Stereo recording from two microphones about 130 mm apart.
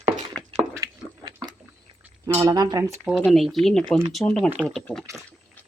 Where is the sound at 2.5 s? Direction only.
30° right (ahead or behind).